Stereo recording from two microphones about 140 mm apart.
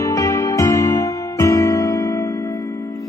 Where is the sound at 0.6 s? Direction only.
25° left (ahead or behind).